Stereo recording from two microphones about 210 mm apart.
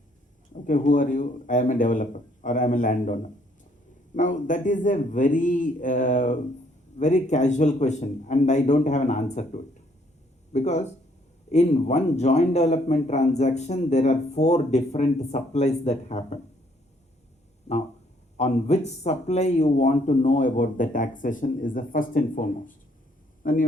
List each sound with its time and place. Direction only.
0.5 s speech: 40° left (ahead or behind)
17.7 s speech: 30° left (ahead or behind)